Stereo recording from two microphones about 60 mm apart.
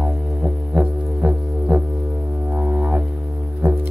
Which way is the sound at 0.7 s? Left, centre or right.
Right.